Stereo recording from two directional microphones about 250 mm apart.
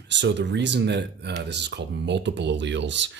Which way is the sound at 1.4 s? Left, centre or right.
Right.